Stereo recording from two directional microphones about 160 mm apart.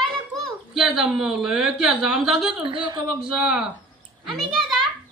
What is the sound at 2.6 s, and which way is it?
Speech, 30° right (ahead or behind).